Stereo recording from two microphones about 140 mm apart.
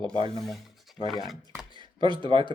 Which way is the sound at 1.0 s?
Centre (ahead or behind).